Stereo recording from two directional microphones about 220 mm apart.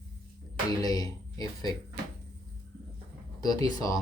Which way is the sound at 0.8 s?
15° left (ahead or behind).